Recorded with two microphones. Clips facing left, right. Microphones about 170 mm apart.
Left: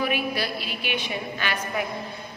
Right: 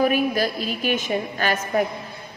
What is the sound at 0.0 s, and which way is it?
A woman's voice, 45° right (ahead or behind).